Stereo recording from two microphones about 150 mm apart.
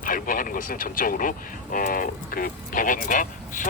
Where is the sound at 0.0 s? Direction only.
65° left (ahead or behind).